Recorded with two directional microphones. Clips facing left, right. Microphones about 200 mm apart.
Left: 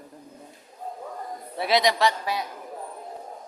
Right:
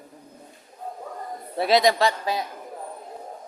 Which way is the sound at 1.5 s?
40° right (ahead or behind).